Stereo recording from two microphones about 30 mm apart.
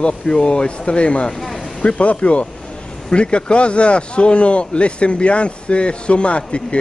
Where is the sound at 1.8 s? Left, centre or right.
Left.